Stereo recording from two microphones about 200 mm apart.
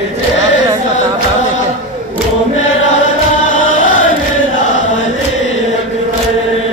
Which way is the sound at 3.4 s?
40° left (ahead or behind).